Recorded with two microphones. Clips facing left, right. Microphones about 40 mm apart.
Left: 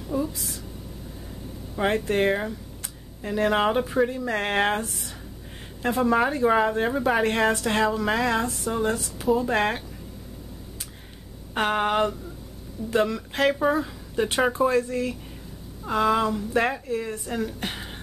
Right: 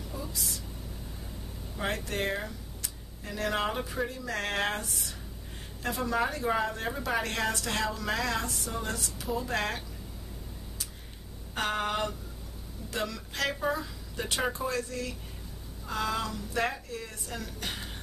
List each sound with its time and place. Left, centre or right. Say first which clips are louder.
0.1 s a sound: left 13 dB; left
1.8 s speech: left 9 dB; left
11.5 s speech: left 8 dB; left